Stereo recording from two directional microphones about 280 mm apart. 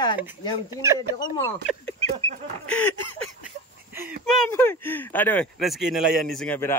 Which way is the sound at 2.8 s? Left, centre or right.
Left.